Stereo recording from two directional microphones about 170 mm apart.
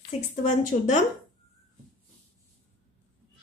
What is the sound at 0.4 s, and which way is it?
Speech, 45° left (ahead or behind).